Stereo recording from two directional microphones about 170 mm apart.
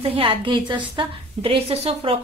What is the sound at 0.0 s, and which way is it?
A woman's voice, 30° right (ahead or behind).